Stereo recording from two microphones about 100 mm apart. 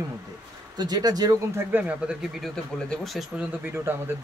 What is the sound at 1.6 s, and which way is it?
Speech, 15° right (ahead or behind).